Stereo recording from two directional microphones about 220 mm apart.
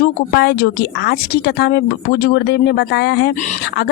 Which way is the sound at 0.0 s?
45° left (ahead or behind).